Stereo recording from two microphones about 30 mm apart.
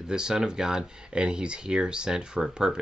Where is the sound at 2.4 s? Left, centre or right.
Centre.